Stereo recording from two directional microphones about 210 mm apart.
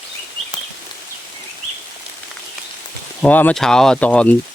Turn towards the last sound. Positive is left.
turn(degrees=5)  # may be behind; listen again after turning